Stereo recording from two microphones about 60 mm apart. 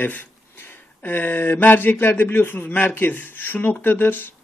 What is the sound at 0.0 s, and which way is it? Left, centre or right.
Speech, left.